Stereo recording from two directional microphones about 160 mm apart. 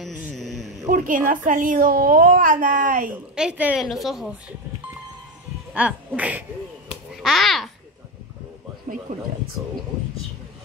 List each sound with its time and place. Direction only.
0.0 s a sound: centre (ahead or behind)
0.8 s a child's voice: 55° right (ahead or behind)
3.3 s a woman's voice: 5° right (ahead or behind)
5.7 s speech: 10° right (ahead or behind)
7.2 s babbling: centre (ahead or behind)
8.9 s a sound: 45° right (ahead or behind)